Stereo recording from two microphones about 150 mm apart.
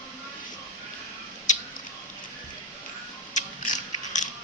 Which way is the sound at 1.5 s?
55° left (ahead or behind).